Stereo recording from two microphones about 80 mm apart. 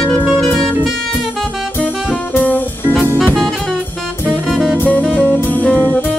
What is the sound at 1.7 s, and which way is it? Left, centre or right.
Music, centre.